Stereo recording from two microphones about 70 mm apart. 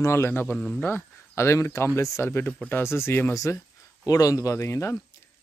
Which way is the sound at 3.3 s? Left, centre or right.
Left.